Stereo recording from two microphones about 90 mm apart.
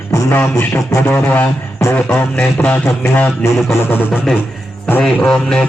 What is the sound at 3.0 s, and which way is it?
Beatboxing, 20° left (ahead or behind).